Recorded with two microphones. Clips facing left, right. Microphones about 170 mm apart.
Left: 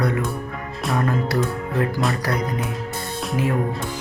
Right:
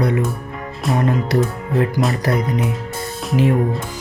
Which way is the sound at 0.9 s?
20° right (ahead or behind).